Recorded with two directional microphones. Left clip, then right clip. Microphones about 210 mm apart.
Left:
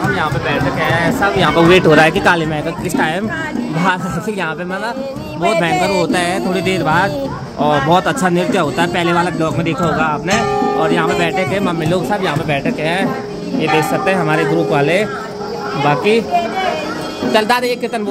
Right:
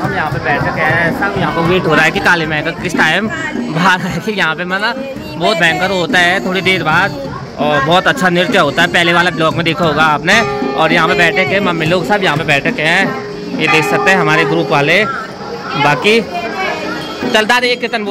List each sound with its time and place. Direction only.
0.2 s speech: 5° left (ahead or behind)
1.4 s speech: 35° left (ahead or behind); by 2.6 s 15° left (ahead or behind)
3.0 s speech: centre (ahead or behind)
5.5 s speech: 10° left (ahead or behind)
8.3 s speech: 5° left (ahead or behind)
17.3 s speech: centre (ahead or behind)